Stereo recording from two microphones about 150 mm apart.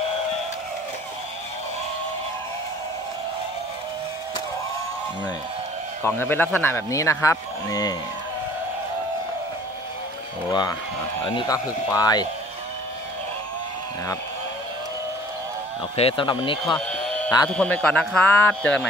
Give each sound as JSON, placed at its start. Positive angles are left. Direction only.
{"t": 6.0, "sound": "speech", "side_deg": 15}
{"t": 10.5, "sound": "speech", "side_deg": 30}
{"t": 16.0, "sound": "speech", "side_deg": 35}
{"t": 16.7, "sound": "sheep", "side_deg": 5}
{"t": 17.5, "sound": "speech", "side_deg": 5}